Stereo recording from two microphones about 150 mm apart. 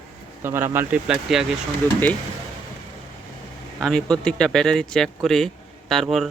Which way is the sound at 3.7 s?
Centre (ahead or behind).